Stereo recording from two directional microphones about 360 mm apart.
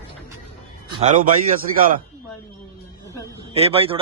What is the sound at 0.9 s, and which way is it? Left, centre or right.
A man's voice, centre.